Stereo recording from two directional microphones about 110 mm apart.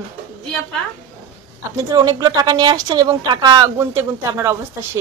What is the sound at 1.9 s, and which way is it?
Speech, 35° right (ahead or behind).